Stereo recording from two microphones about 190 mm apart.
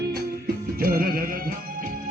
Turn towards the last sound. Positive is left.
turn(degrees=-50)  # may be behind; listen again after turning